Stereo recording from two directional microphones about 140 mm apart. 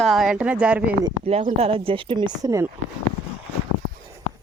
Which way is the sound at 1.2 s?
45° right (ahead or behind).